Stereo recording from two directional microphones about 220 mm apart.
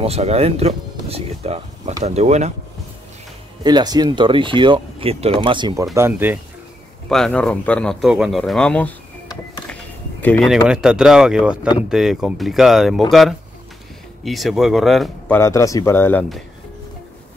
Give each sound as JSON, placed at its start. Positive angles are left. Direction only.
{"t": 0.0, "sound": "speech", "side_deg": -30}
{"t": 3.6, "sound": "speech", "side_deg": -20}
{"t": 5.9, "sound": "speech", "side_deg": -10}
{"t": 7.1, "sound": "speech", "side_deg": 0}
{"t": 10.2, "sound": "speech", "side_deg": 5}
{"t": 14.2, "sound": "speech", "side_deg": 0}